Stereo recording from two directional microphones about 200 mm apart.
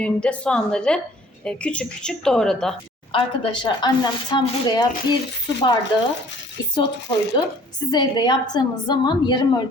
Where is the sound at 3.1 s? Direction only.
25° left (ahead or behind).